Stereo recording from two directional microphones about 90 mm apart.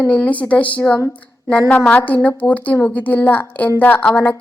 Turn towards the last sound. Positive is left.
turn(degrees=15)  # may be behind; listen again after turning